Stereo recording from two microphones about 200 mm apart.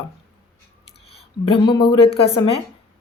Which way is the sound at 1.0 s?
30° left (ahead or behind).